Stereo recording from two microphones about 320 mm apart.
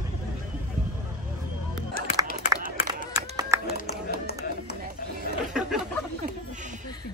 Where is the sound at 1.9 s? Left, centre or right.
Left.